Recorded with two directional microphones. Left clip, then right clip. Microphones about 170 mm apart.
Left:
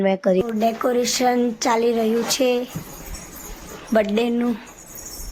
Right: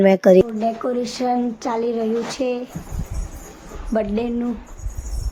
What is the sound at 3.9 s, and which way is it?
Speech, 5° left (ahead or behind).